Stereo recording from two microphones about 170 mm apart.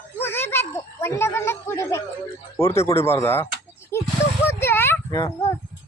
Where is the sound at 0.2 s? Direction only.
15° left (ahead or behind).